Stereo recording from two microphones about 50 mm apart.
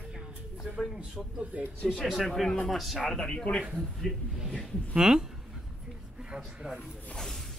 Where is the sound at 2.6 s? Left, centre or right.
Centre.